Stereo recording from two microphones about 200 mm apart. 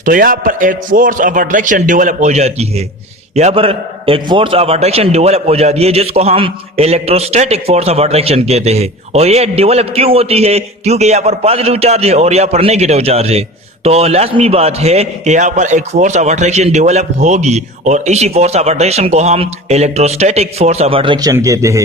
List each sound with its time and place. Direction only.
0.0 s a man's voice: 45° right (ahead or behind); by 21.8 s 15° right (ahead or behind)